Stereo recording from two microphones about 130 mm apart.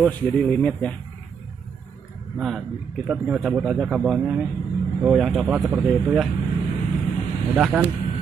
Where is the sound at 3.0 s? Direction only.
10° right (ahead or behind).